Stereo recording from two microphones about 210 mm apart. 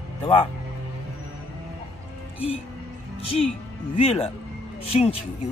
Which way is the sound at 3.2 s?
30° left (ahead or behind).